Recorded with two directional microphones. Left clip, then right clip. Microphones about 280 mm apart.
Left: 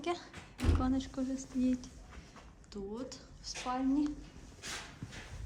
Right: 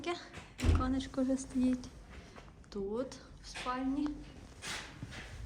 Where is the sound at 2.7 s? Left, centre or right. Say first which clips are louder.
Right 5 dB; centre.